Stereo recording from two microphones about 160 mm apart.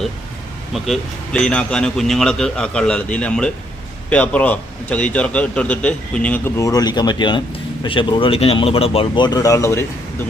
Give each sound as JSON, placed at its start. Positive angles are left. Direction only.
{"t": 0.7, "sound": "a man's voice", "side_deg": 5}
{"t": 6.6, "sound": "speech", "side_deg": 25}